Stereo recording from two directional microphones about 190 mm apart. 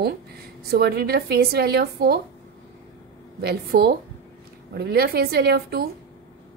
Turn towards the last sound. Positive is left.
turn(degrees=-55)  # may be behind; listen again after turning